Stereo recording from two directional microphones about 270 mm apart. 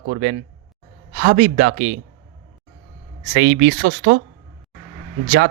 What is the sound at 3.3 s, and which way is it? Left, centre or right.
Speech, right.